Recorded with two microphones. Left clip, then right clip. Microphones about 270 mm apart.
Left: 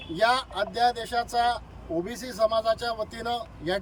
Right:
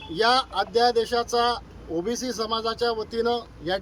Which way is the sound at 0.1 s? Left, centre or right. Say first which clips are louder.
Right 2 dB; centre.